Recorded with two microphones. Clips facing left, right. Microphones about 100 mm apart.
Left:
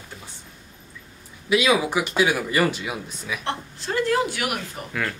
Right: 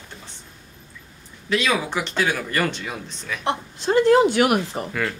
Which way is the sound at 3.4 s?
20° right (ahead or behind).